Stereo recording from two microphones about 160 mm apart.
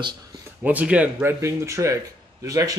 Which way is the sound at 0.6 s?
10° right (ahead or behind).